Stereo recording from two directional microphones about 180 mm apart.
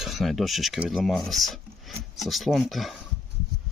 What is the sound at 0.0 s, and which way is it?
Speech, centre (ahead or behind).